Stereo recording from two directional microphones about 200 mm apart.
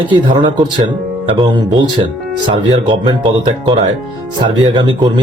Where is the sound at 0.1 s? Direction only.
25° right (ahead or behind).